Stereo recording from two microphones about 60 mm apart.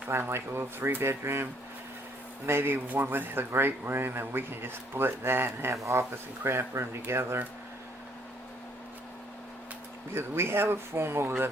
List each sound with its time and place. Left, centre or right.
0.1 s speech: right
2.5 s a man's voice: right
5.7 s speech: right
10.2 s speech: right